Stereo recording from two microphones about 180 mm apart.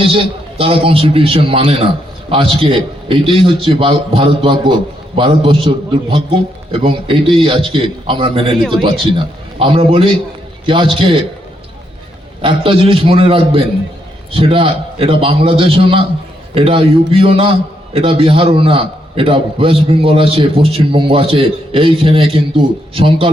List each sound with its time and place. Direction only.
0.0 s a man's voice: 30° right (ahead or behind)
12.4 s a man's voice: 30° right (ahead or behind)